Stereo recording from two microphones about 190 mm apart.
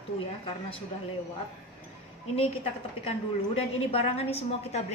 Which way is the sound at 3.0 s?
30° left (ahead or behind).